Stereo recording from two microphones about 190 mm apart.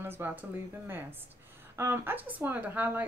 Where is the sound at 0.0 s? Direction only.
10° right (ahead or behind).